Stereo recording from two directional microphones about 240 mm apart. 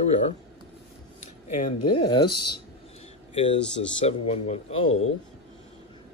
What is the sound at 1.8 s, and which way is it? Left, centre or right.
Speech, left.